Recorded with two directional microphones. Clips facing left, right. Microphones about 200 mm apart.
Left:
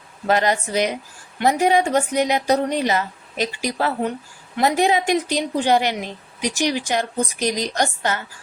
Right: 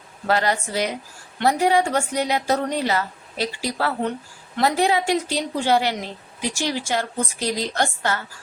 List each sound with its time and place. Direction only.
0.3 s a woman's voice: 20° left (ahead or behind)